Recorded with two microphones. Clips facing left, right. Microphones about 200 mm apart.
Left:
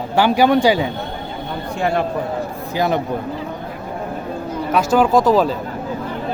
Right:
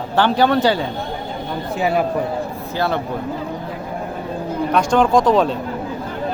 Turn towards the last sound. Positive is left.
turn(degrees=0)  # may be behind; listen again after turning